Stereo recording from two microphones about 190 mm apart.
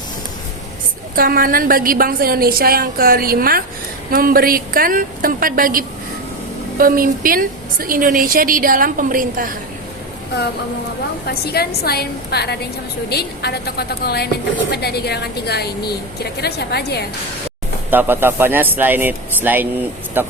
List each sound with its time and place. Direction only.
1.1 s a woman's voice: 50° right (ahead or behind)
11.3 s a woman's voice: 55° left (ahead or behind)
17.9 s speech: 10° right (ahead or behind)